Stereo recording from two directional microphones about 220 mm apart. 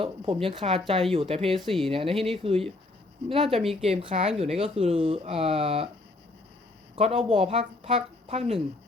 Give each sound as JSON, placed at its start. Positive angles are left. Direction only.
{"t": 0.0, "sound": "speech", "side_deg": -25}
{"t": 6.9, "sound": "speech", "side_deg": -25}